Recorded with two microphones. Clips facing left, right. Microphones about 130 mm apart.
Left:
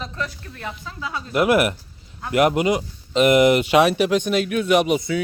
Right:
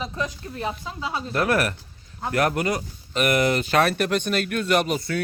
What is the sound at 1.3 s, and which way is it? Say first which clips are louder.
Speech: left 6 dB; 15° left (ahead or behind).